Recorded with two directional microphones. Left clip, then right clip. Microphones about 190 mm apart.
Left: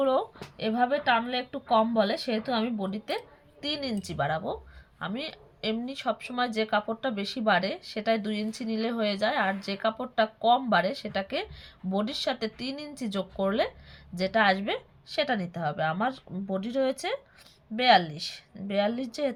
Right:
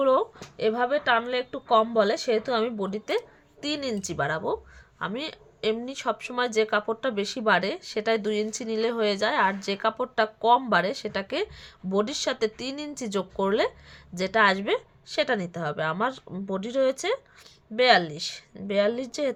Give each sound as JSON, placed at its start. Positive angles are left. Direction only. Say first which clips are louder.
{"t": 0.0, "sound": "speech", "louder": "right 4 dB", "side_deg": -45}